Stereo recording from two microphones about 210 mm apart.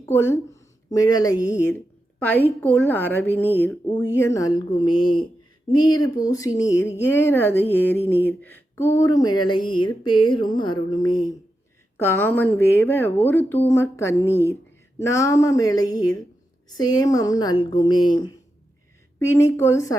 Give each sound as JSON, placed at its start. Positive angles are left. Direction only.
{"t": 0.0, "sound": "a woman's voice", "side_deg": 10}